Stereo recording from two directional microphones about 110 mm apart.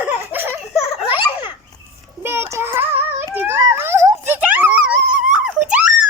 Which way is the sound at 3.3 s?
20° right (ahead or behind).